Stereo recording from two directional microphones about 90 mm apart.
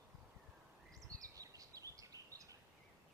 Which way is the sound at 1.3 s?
40° right (ahead or behind).